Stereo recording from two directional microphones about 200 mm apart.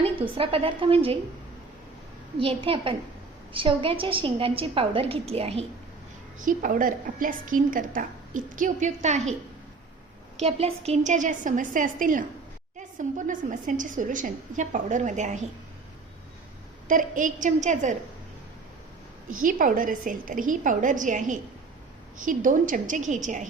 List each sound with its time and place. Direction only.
0.0 s a woman's voice: 30° right (ahead or behind)
2.4 s a woman's voice: 25° right (ahead or behind)
6.4 s a woman's voice: 40° right (ahead or behind)
10.3 s a woman's voice: 30° right (ahead or behind)
16.9 s a woman's voice: 40° right (ahead or behind)
19.4 s a woman's voice: 40° right (ahead or behind)